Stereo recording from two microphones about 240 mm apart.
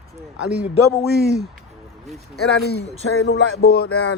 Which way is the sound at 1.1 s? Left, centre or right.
Right.